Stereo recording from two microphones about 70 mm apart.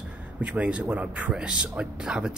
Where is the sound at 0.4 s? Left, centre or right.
Centre.